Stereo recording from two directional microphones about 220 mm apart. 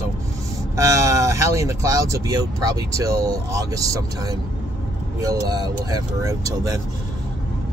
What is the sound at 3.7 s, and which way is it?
Speech, 15° right (ahead or behind).